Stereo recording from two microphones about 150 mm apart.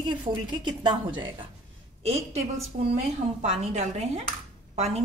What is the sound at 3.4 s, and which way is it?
Speech, 45° right (ahead or behind).